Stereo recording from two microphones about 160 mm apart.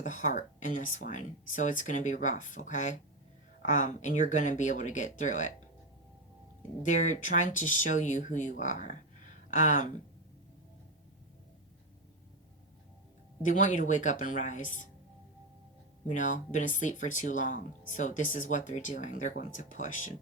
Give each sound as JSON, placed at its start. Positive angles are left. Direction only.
{"t": 0.0, "sound": "speech", "side_deg": 50}
{"t": 6.8, "sound": "speech", "side_deg": 50}
{"t": 13.4, "sound": "speech", "side_deg": 50}
{"t": 16.0, "sound": "speech", "side_deg": 50}